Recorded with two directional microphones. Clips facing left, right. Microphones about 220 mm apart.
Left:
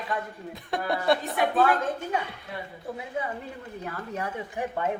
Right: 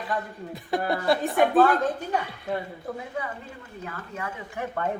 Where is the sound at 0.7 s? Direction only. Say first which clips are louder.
Right 1 dB; centre (ahead or behind).